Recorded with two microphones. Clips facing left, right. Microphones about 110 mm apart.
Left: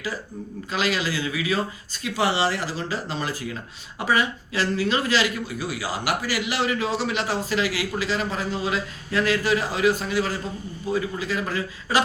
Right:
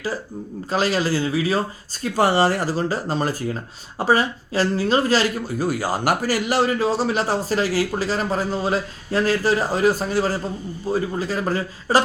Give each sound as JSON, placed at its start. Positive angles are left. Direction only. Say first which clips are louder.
{"t": 0.7, "sound": "speech", "louder": "right 5 dB", "side_deg": -40}